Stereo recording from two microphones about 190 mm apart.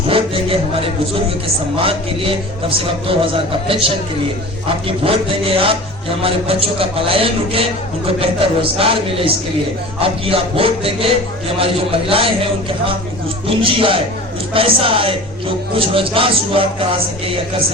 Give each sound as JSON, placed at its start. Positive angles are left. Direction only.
{"t": 0.1, "sound": "a man's voice", "side_deg": -30}